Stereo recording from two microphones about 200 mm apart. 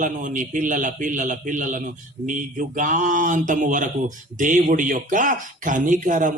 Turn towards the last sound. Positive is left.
turn(degrees=-40)  # may be behind; listen again after turning